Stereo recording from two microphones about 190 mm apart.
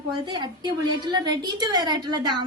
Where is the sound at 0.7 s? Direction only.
20° right (ahead or behind).